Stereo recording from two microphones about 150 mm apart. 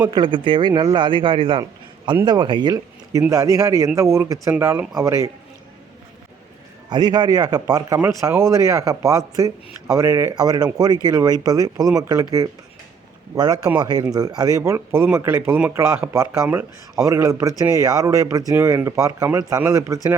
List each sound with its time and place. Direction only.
0.0 s a man's voice: 30° right (ahead or behind)
6.9 s speech: 30° right (ahead or behind)